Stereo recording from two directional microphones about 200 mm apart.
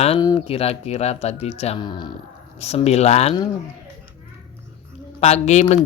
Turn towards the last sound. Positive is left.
turn(degrees=35)  # may be behind; listen again after turning